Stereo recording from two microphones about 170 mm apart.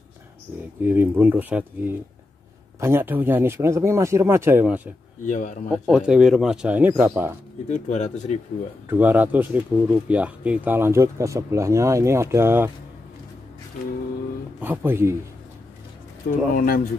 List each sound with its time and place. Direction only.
0.8 s speech: 10° right (ahead or behind)
5.2 s speech: 50° left (ahead or behind)
5.7 s speech: centre (ahead or behind)
7.6 s speech: 45° left (ahead or behind)
8.8 s speech: 10° right (ahead or behind)
14.6 s speech: 10° right (ahead or behind)
16.5 s speech: 55° left (ahead or behind)